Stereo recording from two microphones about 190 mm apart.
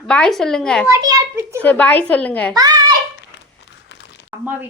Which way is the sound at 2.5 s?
20° right (ahead or behind).